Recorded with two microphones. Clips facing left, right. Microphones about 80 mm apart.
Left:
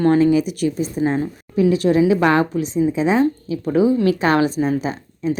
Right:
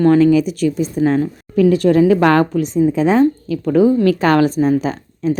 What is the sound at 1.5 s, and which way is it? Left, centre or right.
A woman's voice, right.